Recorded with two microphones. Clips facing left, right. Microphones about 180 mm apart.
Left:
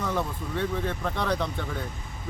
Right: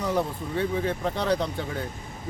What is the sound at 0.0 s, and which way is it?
Speech, 15° right (ahead or behind).